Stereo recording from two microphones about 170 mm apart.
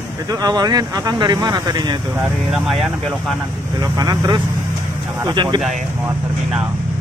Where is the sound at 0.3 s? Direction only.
20° right (ahead or behind).